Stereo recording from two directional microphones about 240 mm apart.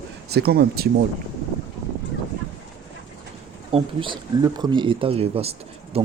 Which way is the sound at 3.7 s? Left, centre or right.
Right.